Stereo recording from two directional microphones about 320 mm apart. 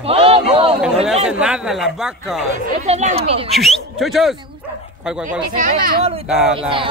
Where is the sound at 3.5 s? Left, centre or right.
Centre.